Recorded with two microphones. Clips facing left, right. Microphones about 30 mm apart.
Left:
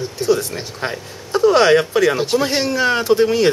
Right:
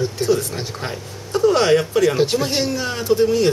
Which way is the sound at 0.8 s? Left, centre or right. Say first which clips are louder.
Left 4 dB; left.